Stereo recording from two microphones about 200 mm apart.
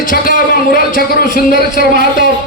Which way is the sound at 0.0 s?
45° left (ahead or behind).